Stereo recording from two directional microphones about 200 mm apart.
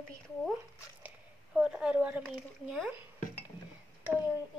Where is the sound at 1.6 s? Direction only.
5° right (ahead or behind).